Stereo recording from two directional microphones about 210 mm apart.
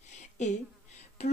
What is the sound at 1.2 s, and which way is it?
Speech, 30° left (ahead or behind).